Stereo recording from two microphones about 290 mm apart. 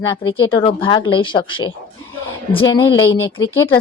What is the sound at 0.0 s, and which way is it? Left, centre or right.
Speech, centre.